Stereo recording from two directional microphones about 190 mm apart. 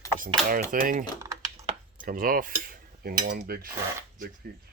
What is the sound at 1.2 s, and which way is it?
Typing, 15° right (ahead or behind).